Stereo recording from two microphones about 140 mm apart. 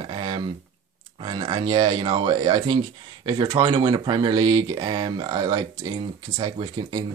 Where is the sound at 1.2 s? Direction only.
35° right (ahead or behind).